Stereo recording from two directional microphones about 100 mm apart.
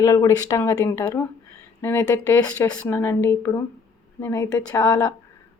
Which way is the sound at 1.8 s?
20° left (ahead or behind).